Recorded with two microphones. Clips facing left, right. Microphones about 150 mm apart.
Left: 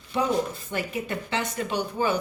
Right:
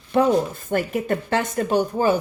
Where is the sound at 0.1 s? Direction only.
50° right (ahead or behind).